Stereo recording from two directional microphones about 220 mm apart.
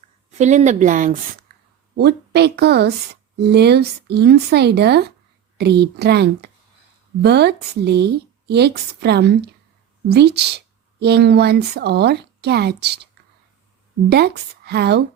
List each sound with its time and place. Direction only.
0.3 s a woman's voice: 30° right (ahead or behind)
2.0 s speech: 50° right (ahead or behind)
14.1 s speech: 50° right (ahead or behind)